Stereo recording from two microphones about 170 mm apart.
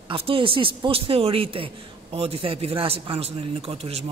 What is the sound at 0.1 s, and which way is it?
A man's voice, 30° right (ahead or behind).